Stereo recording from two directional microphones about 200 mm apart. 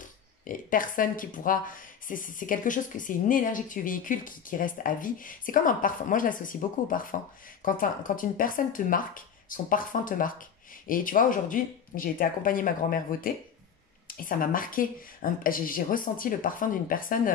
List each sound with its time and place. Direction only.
0.5 s speech: 45° left (ahead or behind)